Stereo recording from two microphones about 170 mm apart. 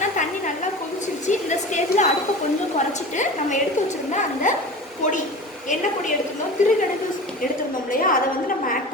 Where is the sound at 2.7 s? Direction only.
45° left (ahead or behind).